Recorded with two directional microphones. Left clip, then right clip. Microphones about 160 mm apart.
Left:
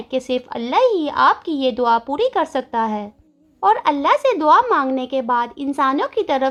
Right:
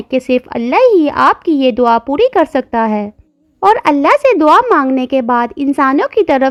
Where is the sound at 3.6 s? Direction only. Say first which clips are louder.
Right 6 dB; 40° right (ahead or behind).